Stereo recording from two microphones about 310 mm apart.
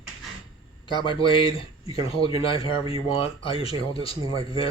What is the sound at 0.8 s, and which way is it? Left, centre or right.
Speech, centre.